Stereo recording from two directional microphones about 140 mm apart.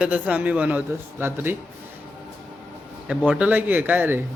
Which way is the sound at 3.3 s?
10° right (ahead or behind).